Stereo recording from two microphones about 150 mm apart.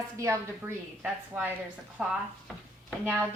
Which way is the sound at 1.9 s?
5° right (ahead or behind).